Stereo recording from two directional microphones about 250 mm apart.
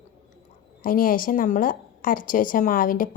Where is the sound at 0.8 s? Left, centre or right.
Left.